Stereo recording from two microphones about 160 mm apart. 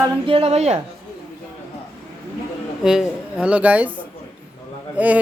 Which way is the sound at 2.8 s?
5° right (ahead or behind).